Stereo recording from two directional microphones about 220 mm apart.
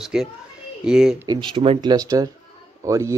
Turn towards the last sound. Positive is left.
turn(degrees=-15)  # may be behind; listen again after turning